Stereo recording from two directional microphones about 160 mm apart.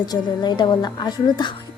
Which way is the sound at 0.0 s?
25° left (ahead or behind).